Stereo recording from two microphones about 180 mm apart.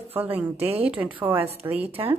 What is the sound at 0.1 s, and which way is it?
A woman's voice, 10° right (ahead or behind).